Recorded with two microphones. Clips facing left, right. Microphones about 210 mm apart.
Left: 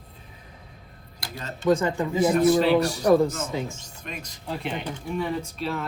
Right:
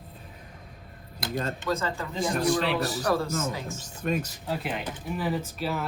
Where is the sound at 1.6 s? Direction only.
15° left (ahead or behind).